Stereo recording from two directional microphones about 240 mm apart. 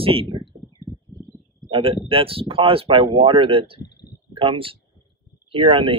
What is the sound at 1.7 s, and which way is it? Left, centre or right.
Speech, right.